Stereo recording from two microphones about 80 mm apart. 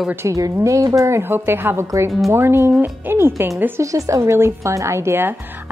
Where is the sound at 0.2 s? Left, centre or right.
Right.